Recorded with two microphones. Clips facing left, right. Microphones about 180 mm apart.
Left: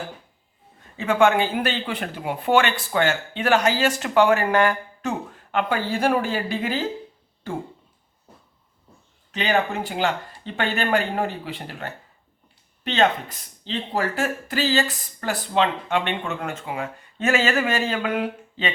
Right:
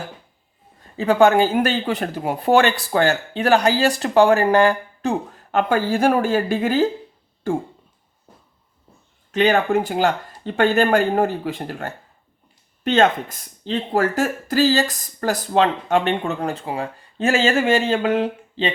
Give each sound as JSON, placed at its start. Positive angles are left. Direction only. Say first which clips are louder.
{"t": 0.9, "sound": "speech", "louder": "right 4 dB", "side_deg": -35}
{"t": 5.5, "sound": "speech", "louder": "right 5 dB", "side_deg": -45}
{"t": 9.3, "sound": "speech", "louder": "right 6 dB", "side_deg": -45}